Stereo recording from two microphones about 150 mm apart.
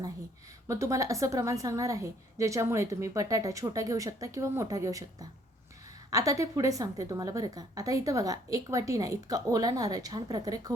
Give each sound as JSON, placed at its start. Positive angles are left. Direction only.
{"t": 0.7, "sound": "a woman's voice", "side_deg": -20}